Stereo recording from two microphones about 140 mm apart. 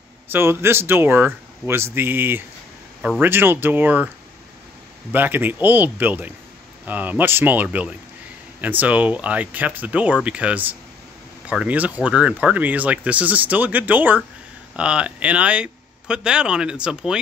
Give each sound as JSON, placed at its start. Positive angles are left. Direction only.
{"t": 0.3, "sound": "speech", "side_deg": -15}
{"t": 5.1, "sound": "speech", "side_deg": -15}